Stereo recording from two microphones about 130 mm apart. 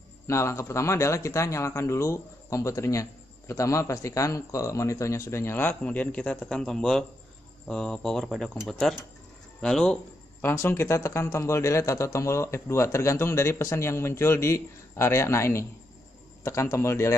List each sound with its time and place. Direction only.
0.3 s speech: 20° left (ahead or behind); by 9.9 s 5° left (ahead or behind)
10.4 s speech: 20° left (ahead or behind)